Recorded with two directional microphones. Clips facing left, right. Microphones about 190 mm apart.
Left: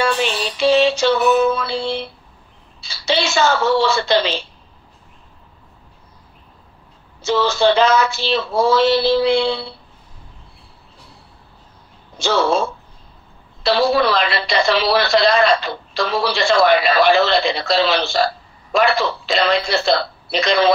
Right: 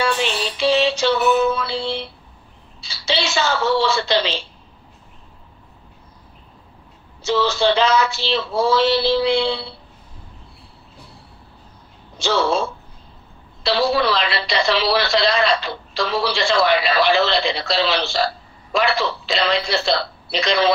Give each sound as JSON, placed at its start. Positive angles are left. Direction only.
{"t": 0.6, "sound": "music", "side_deg": 50}
{"t": 2.8, "sound": "a woman's voice", "side_deg": 50}
{"t": 7.2, "sound": "a woman's voice", "side_deg": 50}
{"t": 12.2, "sound": "a woman's voice", "side_deg": 45}